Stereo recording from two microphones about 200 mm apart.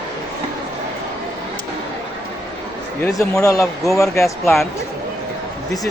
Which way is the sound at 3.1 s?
15° left (ahead or behind).